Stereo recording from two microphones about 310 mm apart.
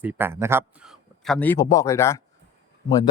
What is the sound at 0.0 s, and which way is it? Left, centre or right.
A man's voice, centre.